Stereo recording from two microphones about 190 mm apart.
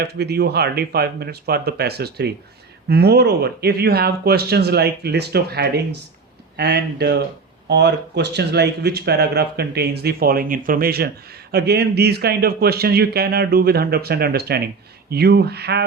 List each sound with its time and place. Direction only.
0.0 s speech: 60° right (ahead or behind)